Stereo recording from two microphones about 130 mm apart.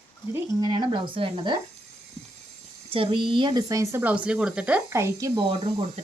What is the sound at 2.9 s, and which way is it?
Speech, 45° right (ahead or behind).